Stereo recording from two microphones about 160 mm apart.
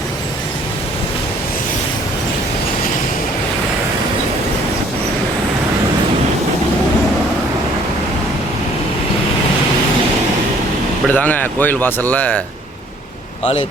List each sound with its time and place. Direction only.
11.1 s a man's voice: 10° left (ahead or behind)
13.4 s speech: 35° left (ahead or behind)